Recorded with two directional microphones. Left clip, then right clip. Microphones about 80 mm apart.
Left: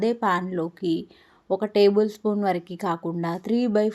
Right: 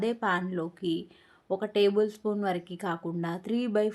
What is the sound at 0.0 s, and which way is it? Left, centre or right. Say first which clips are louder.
A woman's voice: left 6 dB; left.